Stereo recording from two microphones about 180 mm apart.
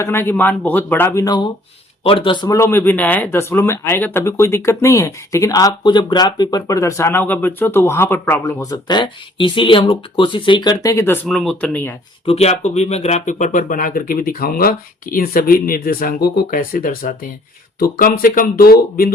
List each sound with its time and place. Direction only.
0.0 s speech: 15° left (ahead or behind)
10.8 s speech: 15° left (ahead or behind)
12.2 s speech: 35° left (ahead or behind); by 19.1 s 55° left (ahead or behind)